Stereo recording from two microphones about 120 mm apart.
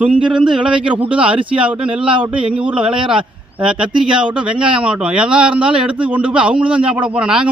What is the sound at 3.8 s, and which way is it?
Speech, 45° right (ahead or behind).